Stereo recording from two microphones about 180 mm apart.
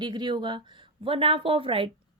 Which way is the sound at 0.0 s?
25° right (ahead or behind).